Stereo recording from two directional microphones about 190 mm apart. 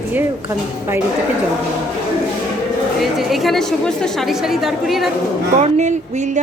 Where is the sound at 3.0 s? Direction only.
Centre (ahead or behind).